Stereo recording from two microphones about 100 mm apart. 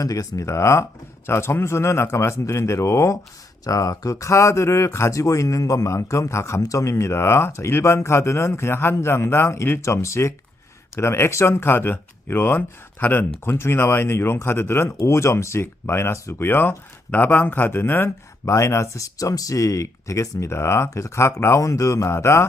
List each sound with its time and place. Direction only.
0.0 s speech: 35° left (ahead or behind)